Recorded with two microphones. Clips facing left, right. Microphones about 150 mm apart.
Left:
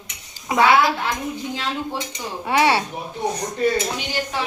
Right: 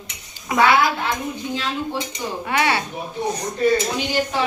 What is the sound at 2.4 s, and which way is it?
Speech, 30° left (ahead or behind).